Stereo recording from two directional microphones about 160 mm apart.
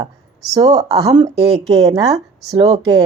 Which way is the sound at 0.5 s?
25° right (ahead or behind).